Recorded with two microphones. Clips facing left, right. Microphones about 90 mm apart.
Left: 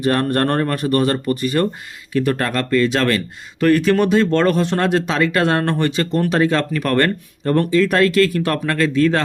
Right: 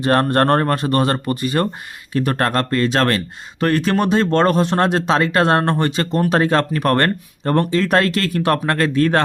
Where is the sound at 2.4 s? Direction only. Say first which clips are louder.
Even; 50° right (ahead or behind).